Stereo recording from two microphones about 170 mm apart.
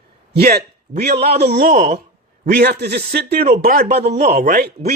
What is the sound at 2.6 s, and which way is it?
Speech, 75° right (ahead or behind).